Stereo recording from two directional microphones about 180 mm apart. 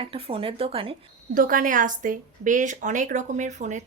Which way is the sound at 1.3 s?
50° right (ahead or behind).